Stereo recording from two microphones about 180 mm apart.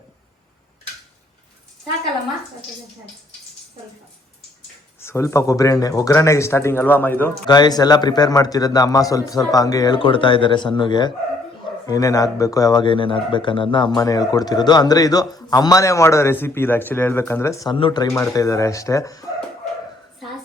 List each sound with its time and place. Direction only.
4.9 s speech: 15° left (ahead or behind)
7.4 s speech: 25° left (ahead or behind)